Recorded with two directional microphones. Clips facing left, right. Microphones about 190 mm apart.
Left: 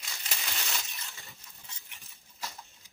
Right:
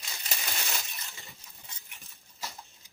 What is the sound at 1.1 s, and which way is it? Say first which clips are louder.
Cutlery: right 1 dB; centre (ahead or behind).